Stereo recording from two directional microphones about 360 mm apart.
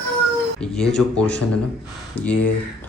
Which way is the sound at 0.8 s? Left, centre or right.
Centre.